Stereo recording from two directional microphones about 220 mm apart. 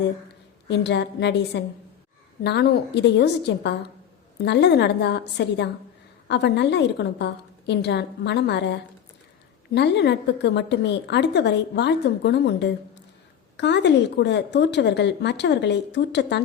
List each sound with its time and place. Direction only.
0.7 s a woman's voice: 50° left (ahead or behind)